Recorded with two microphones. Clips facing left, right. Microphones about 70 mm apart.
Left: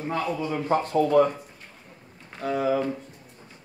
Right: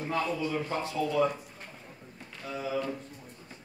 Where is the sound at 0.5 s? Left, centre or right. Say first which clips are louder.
Left 7 dB; left.